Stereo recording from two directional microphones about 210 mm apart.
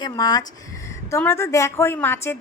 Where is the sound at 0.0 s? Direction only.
15° left (ahead or behind).